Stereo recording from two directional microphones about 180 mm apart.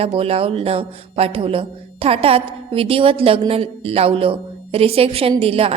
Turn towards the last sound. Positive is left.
turn(degrees=-35)  # may be behind; listen again after turning